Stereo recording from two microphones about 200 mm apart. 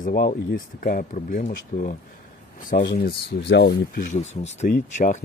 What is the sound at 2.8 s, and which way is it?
Speech, 50° left (ahead or behind).